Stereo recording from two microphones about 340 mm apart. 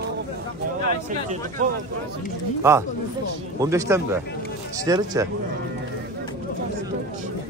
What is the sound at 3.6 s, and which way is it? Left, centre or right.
Speech, centre.